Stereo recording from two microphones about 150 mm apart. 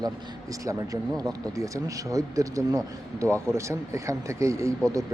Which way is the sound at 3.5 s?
20° right (ahead or behind).